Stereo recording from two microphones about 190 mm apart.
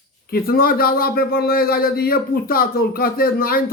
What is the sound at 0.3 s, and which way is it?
A man's voice, 50° left (ahead or behind).